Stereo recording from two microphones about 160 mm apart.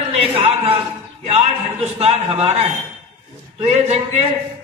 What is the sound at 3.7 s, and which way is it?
Speech, 40° right (ahead or behind).